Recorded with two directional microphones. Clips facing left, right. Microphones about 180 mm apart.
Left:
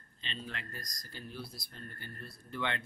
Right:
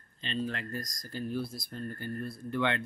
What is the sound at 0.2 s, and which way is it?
Speech, 45° right (ahead or behind).